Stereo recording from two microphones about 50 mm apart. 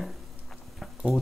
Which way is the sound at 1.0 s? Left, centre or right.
Centre.